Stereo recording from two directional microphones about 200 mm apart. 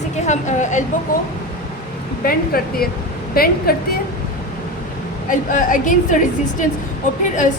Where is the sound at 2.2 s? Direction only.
50° left (ahead or behind).